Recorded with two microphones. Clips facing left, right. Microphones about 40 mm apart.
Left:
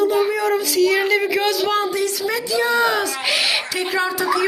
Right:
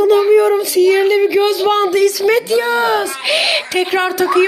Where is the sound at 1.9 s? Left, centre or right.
Right.